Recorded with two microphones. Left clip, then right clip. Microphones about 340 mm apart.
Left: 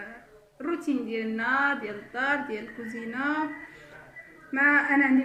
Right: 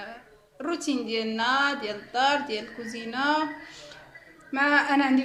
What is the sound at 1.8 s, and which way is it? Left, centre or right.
Speech, right.